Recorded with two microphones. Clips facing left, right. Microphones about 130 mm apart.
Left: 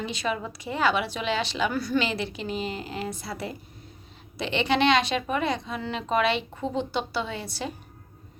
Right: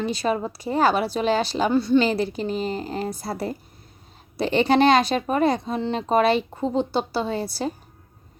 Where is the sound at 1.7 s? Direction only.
25° right (ahead or behind).